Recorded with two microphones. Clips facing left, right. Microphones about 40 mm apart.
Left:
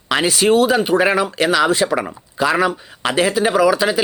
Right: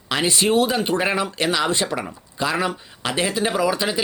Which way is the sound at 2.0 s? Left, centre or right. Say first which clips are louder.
Left 6 dB; left.